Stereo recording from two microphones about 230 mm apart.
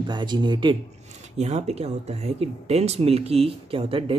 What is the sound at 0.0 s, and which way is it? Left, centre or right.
Speech, centre.